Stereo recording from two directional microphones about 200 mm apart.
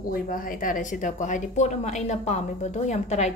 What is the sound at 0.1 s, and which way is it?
A woman's voice, 45° left (ahead or behind).